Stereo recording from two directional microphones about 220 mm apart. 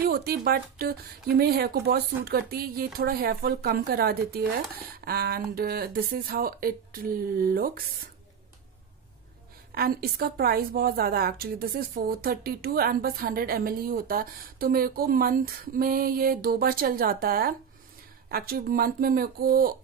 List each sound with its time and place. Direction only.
0.1 s a woman's voice: 45° right (ahead or behind)
9.8 s a woman's voice: 45° right (ahead or behind)